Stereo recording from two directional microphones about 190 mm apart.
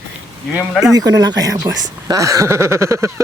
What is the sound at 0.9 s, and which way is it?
Speech, 20° right (ahead or behind).